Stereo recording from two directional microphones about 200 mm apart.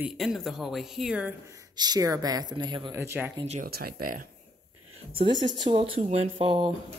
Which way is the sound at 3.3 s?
30° right (ahead or behind).